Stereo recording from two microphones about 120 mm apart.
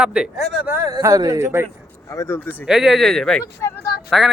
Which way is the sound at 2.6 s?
5° right (ahead or behind).